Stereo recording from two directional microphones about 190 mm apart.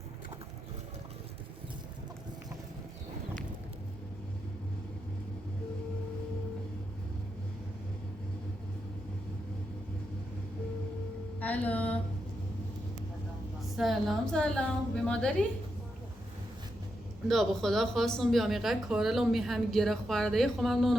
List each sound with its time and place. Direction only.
11.3 s a sound: 10° left (ahead or behind)
13.6 s speech: centre (ahead or behind)
17.2 s speech: centre (ahead or behind)